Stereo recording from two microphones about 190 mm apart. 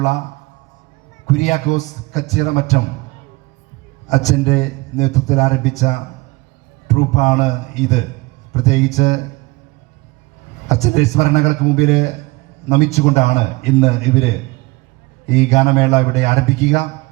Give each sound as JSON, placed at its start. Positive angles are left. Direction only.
{"t": 1.3, "sound": "a man's voice", "side_deg": 35}
{"t": 4.1, "sound": "a man's voice", "side_deg": 35}
{"t": 10.7, "sound": "a man's voice", "side_deg": 35}
{"t": 15.3, "sound": "a man's voice", "side_deg": 35}